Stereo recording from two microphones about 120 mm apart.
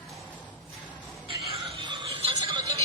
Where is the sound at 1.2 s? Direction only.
45° right (ahead or behind).